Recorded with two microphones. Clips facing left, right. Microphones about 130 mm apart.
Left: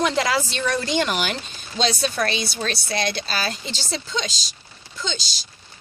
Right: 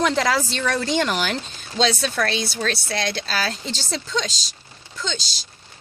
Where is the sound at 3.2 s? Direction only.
90° right.